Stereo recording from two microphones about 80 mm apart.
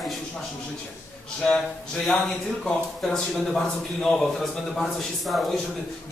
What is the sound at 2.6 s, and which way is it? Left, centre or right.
A man's voice, centre.